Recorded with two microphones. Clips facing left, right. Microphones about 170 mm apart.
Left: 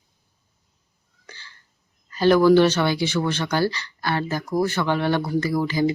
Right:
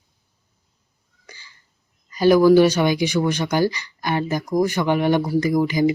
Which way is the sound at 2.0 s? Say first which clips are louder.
Right 2 dB; 10° right (ahead or behind).